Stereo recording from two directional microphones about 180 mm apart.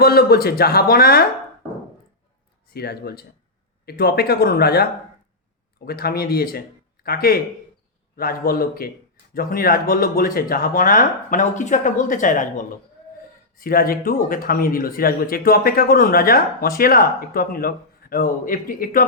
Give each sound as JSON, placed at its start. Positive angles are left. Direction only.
{"t": 0.0, "sound": "speech", "side_deg": 60}
{"t": 2.7, "sound": "speech", "side_deg": 60}
{"t": 13.6, "sound": "speech", "side_deg": 55}